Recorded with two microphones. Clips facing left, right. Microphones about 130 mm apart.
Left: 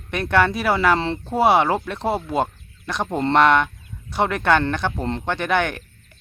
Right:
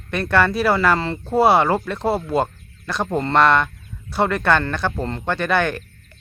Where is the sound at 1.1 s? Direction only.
5° right (ahead or behind).